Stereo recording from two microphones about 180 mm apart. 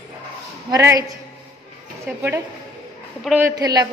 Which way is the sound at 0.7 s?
20° right (ahead or behind).